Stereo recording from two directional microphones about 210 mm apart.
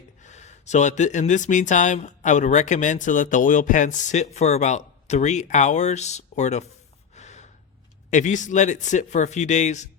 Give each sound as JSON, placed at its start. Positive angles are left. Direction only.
{"t": 0.2, "sound": "speech", "side_deg": 35}
{"t": 7.2, "sound": "gasp", "side_deg": 35}
{"t": 8.1, "sound": "speech", "side_deg": 35}